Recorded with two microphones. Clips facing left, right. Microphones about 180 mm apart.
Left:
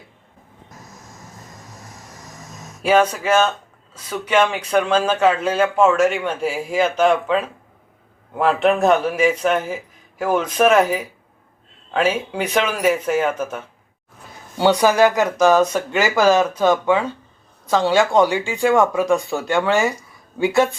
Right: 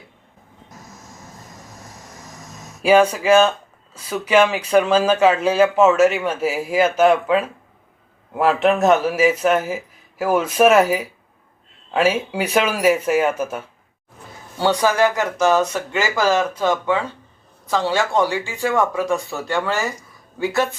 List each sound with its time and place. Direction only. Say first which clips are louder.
2.8 s speech: right 2 dB; 10° right (ahead or behind)
14.6 s speech: left 3 dB; 15° left (ahead or behind)